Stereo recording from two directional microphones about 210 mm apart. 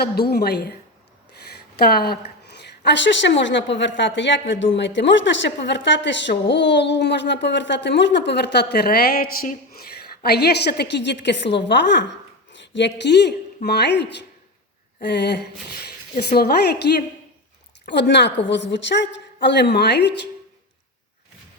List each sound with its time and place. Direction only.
0.0 s a woman's voice: 50° left (ahead or behind)
14.9 s a sound: 55° left (ahead or behind)
16.3 s a woman's voice: 50° left (ahead or behind)